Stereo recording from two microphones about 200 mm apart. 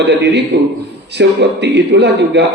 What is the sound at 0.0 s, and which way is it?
A man's voice, 60° right (ahead or behind).